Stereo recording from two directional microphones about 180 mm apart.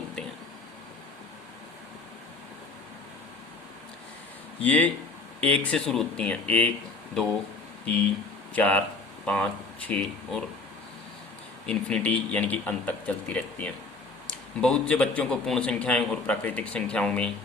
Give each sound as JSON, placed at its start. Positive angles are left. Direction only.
{"t": 4.6, "sound": "speech", "side_deg": 10}
{"t": 8.5, "sound": "speech", "side_deg": 5}
{"t": 11.6, "sound": "speech", "side_deg": 5}